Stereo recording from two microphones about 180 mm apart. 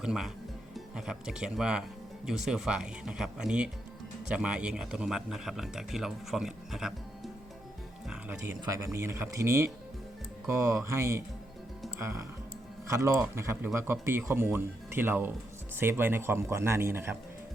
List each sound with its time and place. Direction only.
0.0 s speech: 5° right (ahead or behind)
8.1 s speech: 5° right (ahead or behind)
11.9 s music: 15° right (ahead or behind)
12.9 s speech: 15° right (ahead or behind)